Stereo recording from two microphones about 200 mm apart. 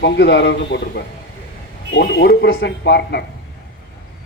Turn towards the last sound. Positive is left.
turn(degrees=55)  # may be behind; listen again after turning